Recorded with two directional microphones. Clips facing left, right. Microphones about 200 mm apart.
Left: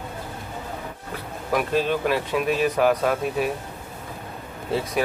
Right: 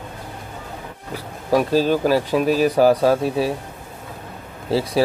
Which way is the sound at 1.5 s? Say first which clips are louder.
Right 6 dB; 35° right (ahead or behind).